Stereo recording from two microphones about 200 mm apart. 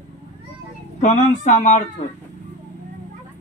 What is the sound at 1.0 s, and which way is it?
Speech, 40° left (ahead or behind).